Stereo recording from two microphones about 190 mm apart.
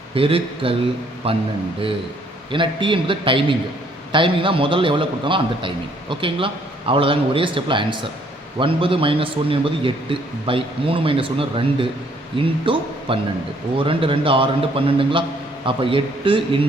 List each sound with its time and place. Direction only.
0.1 s a man's voice: 30° right (ahead or behind)
2.5 s a man's voice: 25° right (ahead or behind)